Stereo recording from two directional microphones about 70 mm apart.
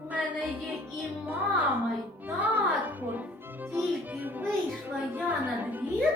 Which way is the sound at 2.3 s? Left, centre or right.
Right.